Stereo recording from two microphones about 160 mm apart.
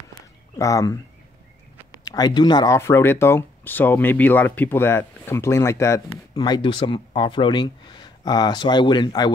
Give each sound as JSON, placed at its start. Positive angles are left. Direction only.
{"t": 0.6, "sound": "speech", "side_deg": 20}